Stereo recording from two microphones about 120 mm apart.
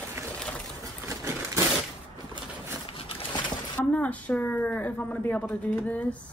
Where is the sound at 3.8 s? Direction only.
15° left (ahead or behind).